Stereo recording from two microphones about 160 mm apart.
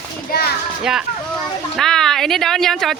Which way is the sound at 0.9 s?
5° right (ahead or behind).